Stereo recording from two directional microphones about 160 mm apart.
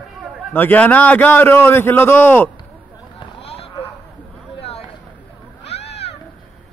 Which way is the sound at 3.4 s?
35° left (ahead or behind).